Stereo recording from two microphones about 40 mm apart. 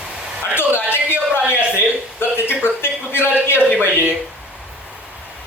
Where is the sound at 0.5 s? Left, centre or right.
Left.